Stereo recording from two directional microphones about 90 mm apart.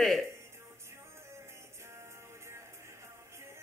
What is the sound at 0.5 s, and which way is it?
Music, 30° right (ahead or behind).